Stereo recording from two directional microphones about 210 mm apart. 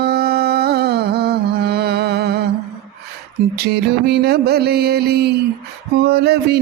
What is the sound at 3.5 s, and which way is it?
Mantra, 50° right (ahead or behind).